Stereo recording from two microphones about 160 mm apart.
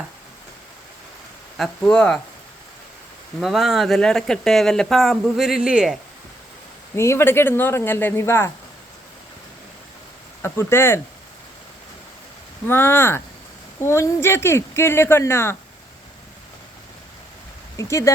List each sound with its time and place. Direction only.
1.5 s speech: 5° left (ahead or behind)
3.4 s speech: centre (ahead or behind)
6.9 s speech: 15° left (ahead or behind)
10.4 s speech: 15° left (ahead or behind)
12.6 s speech: 15° left (ahead or behind)
17.7 s speech: 20° left (ahead or behind)